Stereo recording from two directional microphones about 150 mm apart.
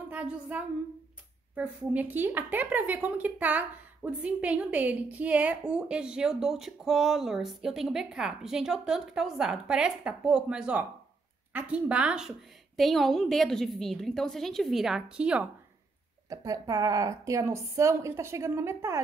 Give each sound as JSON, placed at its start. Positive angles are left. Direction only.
{"t": 0.1, "sound": "a woman's voice", "side_deg": -10}
{"t": 16.3, "sound": "speech", "side_deg": -25}